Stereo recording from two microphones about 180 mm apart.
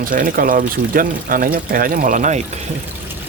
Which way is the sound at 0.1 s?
50° right (ahead or behind).